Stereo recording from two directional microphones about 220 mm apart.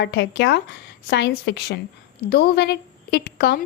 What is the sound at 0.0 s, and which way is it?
A woman's voice, 50° left (ahead or behind).